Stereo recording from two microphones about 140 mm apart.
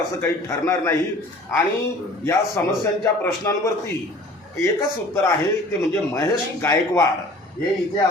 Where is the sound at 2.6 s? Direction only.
15° left (ahead or behind).